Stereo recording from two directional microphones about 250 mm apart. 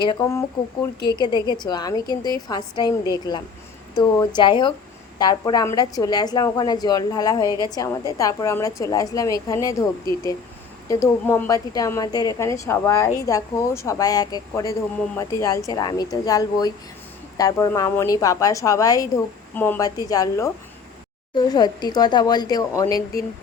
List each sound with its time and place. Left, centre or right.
0.0 s a woman's voice: centre